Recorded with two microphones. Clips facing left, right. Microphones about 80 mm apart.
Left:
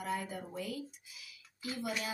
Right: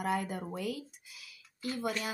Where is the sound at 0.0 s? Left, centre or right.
Right.